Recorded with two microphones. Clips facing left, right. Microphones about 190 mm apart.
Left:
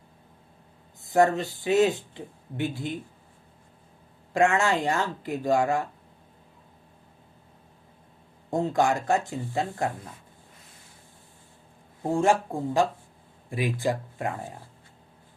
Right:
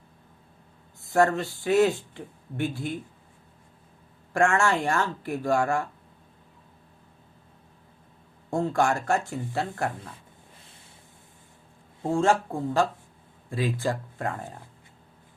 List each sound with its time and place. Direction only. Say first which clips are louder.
1.0 s speech: left 1 dB; 20° left (ahead or behind)
4.4 s speech: even; 20° left (ahead or behind)
8.4 s speech: left 1 dB; 20° left (ahead or behind)
12.0 s speech: even; 15° left (ahead or behind)